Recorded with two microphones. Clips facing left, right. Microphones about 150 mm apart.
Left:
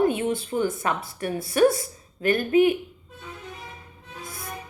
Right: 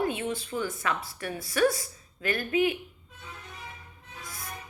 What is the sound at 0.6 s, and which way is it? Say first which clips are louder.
Speech: left 5 dB; 25° left (ahead or behind).